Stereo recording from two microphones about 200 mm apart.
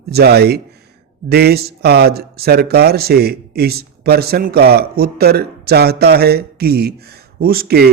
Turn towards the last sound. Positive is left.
turn(degrees=-50)  # may be behind; listen again after turning